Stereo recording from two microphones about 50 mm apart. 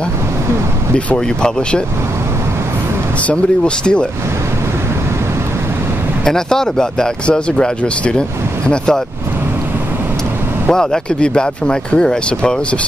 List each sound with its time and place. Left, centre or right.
0.9 s speech: centre
3.3 s speech: left
6.2 s speech: centre
10.7 s speech: centre